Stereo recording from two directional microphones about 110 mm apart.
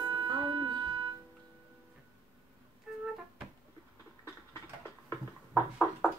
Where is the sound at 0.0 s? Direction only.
40° right (ahead or behind).